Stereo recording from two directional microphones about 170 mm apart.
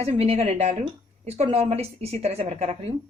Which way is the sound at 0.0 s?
35° right (ahead or behind).